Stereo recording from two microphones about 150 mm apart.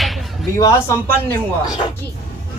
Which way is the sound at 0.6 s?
20° left (ahead or behind).